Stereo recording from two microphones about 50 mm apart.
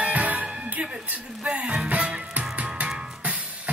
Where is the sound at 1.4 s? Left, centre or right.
Centre.